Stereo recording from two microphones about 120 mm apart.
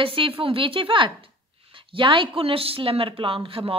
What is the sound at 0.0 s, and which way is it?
A woman's voice, 45° right (ahead or behind).